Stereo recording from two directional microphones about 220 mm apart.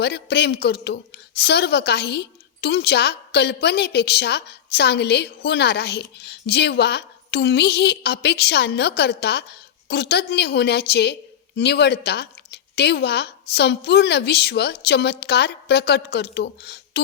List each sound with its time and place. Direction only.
0.0 s a woman's voice: 50° left (ahead or behind)